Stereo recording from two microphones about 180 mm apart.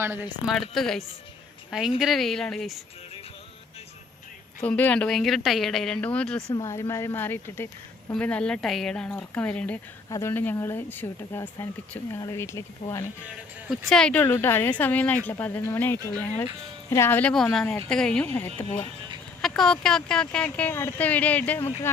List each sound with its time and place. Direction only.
0.0 s a woman's voice: 10° right (ahead or behind)
0.5 s speech: centre (ahead or behind)
4.6 s speech: 10° left (ahead or behind)
6.5 s speech: 15° left (ahead or behind)
13.7 s speech: centre (ahead or behind)